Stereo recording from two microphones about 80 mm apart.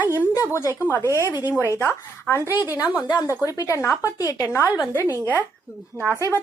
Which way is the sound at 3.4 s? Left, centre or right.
Left.